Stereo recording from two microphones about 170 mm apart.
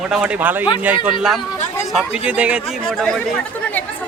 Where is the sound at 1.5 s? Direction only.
45° left (ahead or behind).